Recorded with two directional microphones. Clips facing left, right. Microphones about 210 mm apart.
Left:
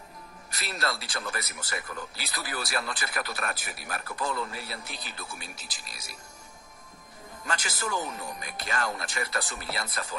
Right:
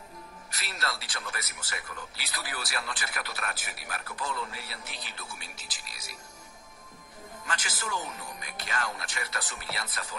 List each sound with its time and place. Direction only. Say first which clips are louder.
0.6 s speech: left 4 dB; 40° left (ahead or behind)
7.4 s speech: left 4 dB; 40° left (ahead or behind)